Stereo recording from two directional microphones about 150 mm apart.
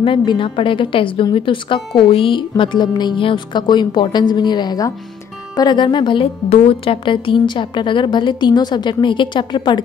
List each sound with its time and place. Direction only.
0.0 s a woman's voice: 35° left (ahead or behind)